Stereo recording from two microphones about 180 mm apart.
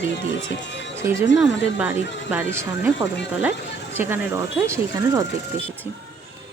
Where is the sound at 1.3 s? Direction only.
80° left.